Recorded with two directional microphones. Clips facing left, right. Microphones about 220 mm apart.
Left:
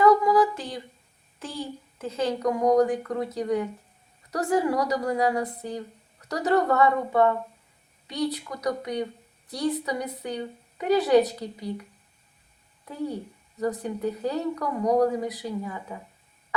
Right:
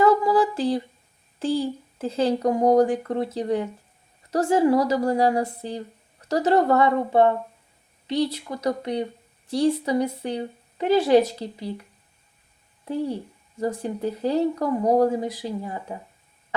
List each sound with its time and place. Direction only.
0.0 s a sound: 30° right (ahead or behind)
1.4 s speech: 30° right (ahead or behind)
13.6 s speech: 30° right (ahead or behind)